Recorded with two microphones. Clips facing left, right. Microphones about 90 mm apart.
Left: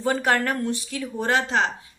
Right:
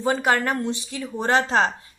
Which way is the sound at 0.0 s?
15° right (ahead or behind).